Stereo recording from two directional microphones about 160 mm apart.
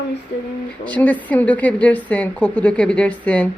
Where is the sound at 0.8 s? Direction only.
10° left (ahead or behind).